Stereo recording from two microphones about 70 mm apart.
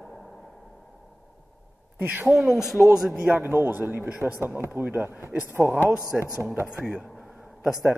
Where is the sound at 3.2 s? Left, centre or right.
Right.